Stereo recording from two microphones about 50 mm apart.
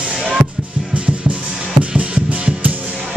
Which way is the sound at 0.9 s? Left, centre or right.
Right.